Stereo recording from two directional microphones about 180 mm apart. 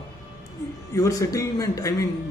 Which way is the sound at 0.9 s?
20° left (ahead or behind).